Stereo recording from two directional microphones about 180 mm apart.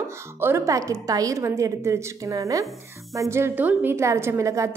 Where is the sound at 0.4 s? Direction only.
15° right (ahead or behind).